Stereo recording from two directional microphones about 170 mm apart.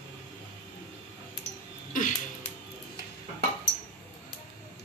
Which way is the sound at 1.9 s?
50° left (ahead or behind).